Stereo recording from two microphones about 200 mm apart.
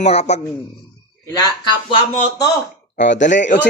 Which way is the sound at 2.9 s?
65° left (ahead or behind).